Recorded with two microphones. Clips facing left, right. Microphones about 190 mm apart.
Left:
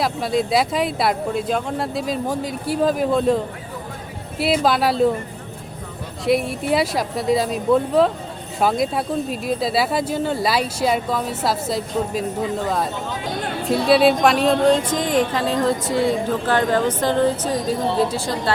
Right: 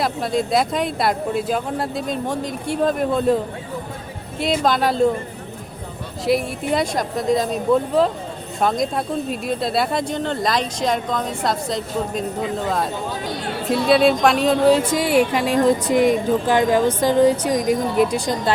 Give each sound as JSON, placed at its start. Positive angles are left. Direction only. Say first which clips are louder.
{"t": 0.0, "sound": "speech", "louder": "even", "side_deg": 0}
{"t": 6.2, "sound": "speech", "louder": "left 1 dB", "side_deg": 0}